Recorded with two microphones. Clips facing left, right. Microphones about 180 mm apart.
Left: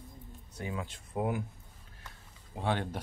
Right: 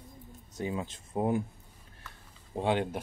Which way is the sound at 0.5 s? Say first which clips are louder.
Right 4 dB; 25° right (ahead or behind).